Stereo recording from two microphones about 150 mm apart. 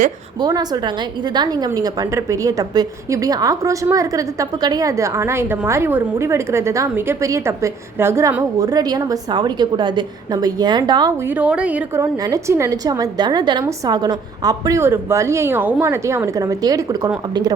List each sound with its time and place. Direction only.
0.3 s a woman's voice: 25° right (ahead or behind)
11.3 s a woman's voice: 10° right (ahead or behind)
11.9 s a woman's voice: 20° right (ahead or behind)